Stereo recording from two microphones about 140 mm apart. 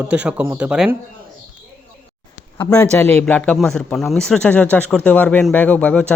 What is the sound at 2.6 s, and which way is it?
Speech, 15° left (ahead or behind).